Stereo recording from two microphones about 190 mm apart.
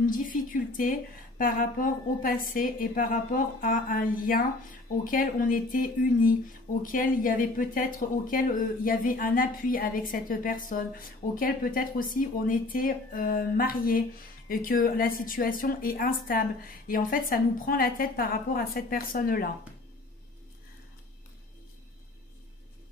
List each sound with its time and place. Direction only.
0.0 s a woman's voice: 45° left (ahead or behind)